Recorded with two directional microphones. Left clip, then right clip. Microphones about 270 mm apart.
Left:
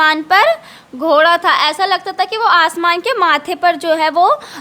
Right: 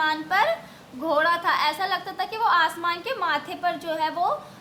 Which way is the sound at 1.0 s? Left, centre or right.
Left.